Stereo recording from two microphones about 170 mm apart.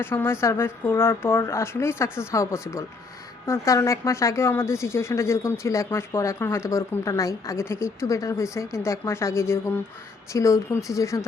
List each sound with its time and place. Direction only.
0.0 s speech: 15° left (ahead or behind)